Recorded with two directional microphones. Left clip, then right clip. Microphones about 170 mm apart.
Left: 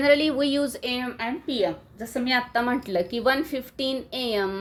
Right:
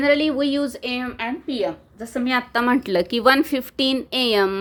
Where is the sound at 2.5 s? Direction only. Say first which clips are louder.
Right 5 dB; 45° right (ahead or behind).